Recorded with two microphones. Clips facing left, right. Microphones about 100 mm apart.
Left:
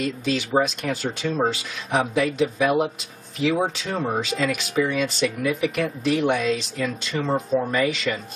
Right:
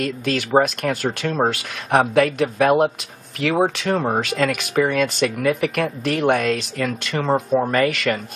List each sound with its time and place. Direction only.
0.0 s speech: 60° right (ahead or behind)